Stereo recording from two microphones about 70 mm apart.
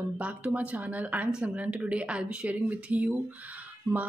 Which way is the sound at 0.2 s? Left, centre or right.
Right.